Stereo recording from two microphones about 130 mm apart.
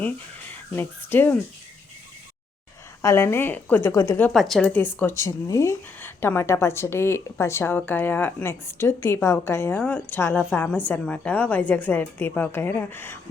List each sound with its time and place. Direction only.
0.8 s a woman's voice: 15° left (ahead or behind)
3.0 s a woman's voice: 20° left (ahead or behind)
4.3 s a woman's voice: centre (ahead or behind)
4.7 s a woman's voice: 15° left (ahead or behind)